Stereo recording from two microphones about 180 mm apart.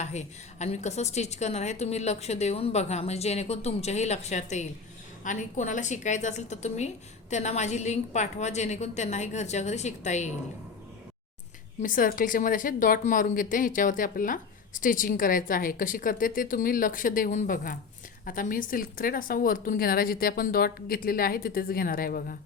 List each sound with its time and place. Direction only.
0.0 s a woman's voice: 40° left (ahead or behind)
11.8 s a woman's voice: 50° left (ahead or behind)